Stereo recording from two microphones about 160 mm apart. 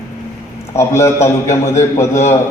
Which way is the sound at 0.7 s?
15° left (ahead or behind).